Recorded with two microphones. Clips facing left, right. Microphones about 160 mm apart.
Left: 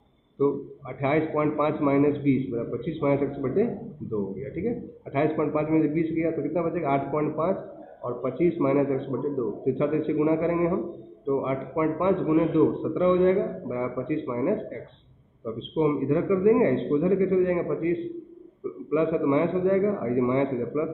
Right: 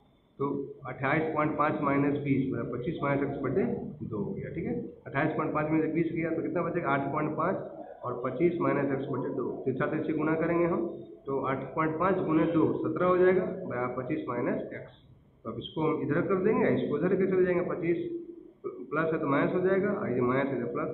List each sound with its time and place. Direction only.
1.0 s a man's voice: 20° left (ahead or behind)
5.1 s a man's voice: 25° left (ahead or behind)
15.7 s a man's voice: 25° left (ahead or behind)